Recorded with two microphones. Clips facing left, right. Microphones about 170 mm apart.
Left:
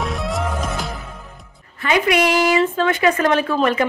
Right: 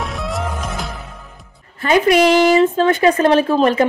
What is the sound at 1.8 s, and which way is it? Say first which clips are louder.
A woman's voice: right 5 dB; 35° right (ahead or behind).